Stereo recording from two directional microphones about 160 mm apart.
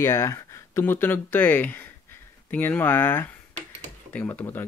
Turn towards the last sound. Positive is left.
turn(degrees=15)  # may be behind; listen again after turning